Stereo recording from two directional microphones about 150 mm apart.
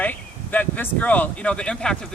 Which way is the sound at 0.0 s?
10° left (ahead or behind).